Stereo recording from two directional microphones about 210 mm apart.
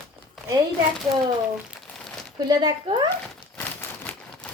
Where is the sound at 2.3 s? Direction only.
20° right (ahead or behind).